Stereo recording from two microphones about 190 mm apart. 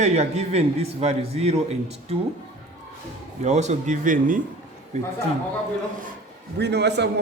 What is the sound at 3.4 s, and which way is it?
A man's voice, 35° right (ahead or behind).